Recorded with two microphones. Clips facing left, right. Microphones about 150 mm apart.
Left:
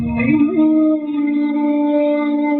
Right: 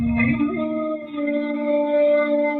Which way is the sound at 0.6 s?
30° left (ahead or behind).